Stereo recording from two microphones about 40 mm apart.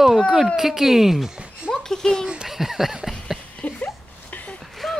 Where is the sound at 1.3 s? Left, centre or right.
Right.